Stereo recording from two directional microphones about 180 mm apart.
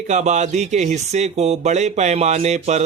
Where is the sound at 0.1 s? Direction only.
40° right (ahead or behind).